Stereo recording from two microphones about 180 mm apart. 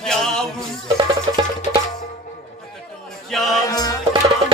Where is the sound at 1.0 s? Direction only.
25° right (ahead or behind).